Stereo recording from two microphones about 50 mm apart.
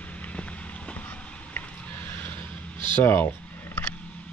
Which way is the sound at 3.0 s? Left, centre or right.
Left.